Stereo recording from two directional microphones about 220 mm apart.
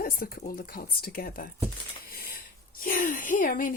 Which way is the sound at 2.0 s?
40° left (ahead or behind).